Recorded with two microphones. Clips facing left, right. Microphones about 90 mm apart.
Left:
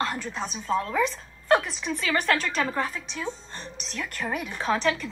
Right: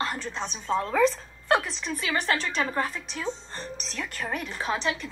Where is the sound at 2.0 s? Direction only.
45° left (ahead or behind).